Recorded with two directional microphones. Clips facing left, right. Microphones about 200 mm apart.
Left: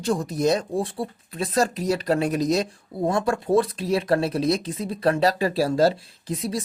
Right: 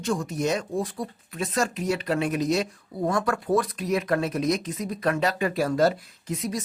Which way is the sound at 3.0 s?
25° left (ahead or behind).